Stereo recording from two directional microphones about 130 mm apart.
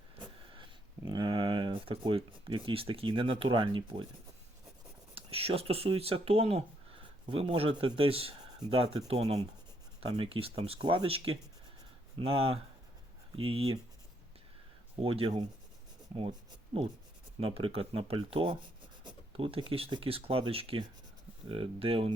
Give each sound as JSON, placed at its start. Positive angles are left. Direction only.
{"t": 0.5, "sound": "speech", "side_deg": -35}
{"t": 5.1, "sound": "speech", "side_deg": -50}
{"t": 14.9, "sound": "speech", "side_deg": -45}
{"t": 17.4, "sound": "speech", "side_deg": -45}